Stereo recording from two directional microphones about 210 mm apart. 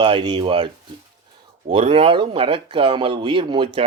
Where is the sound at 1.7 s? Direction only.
25° right (ahead or behind).